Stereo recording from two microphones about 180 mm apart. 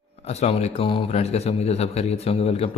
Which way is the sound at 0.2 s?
35° left (ahead or behind).